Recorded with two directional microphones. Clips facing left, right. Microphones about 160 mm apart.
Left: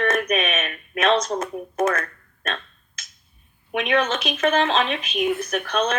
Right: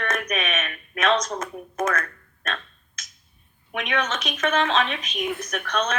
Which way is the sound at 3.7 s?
30° left (ahead or behind).